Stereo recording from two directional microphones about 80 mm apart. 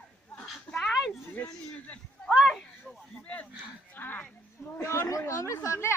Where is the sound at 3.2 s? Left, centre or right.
Centre.